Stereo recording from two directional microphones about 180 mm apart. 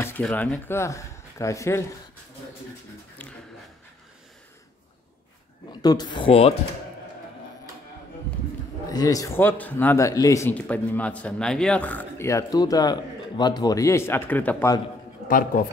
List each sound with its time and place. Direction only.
0.0 s speech: 10° left (ahead or behind)
5.7 s speech: 20° left (ahead or behind)
8.9 s speech: 20° left (ahead or behind)
15.2 s speech: 50° left (ahead or behind)